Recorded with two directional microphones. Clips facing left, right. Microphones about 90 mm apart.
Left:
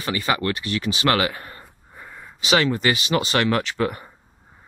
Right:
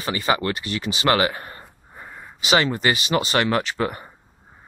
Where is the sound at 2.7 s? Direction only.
10° right (ahead or behind).